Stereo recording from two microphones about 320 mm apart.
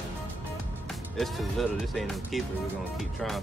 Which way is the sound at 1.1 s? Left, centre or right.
Centre.